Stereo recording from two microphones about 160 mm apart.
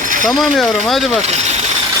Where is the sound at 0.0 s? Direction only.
55° right (ahead or behind).